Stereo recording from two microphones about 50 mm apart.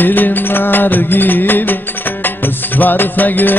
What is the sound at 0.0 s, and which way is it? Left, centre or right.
Music, left.